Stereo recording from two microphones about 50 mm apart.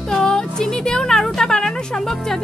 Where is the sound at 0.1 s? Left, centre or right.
Centre.